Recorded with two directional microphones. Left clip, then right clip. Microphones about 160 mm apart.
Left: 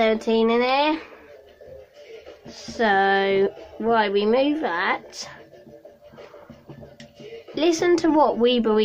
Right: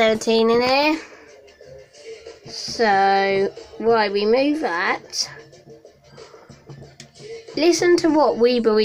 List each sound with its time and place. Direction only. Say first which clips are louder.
0.0 s speech: right 3 dB; 20° right (ahead or behind)
2.4 s speech: right 3 dB; 5° right (ahead or behind)
7.5 s speech: right 3 dB; 5° right (ahead or behind)